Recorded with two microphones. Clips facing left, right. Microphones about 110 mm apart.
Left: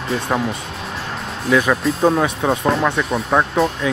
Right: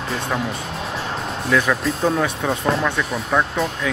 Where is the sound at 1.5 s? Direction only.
5° left (ahead or behind).